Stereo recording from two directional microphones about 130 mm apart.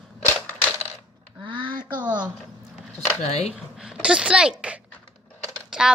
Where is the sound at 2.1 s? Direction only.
35° right (ahead or behind).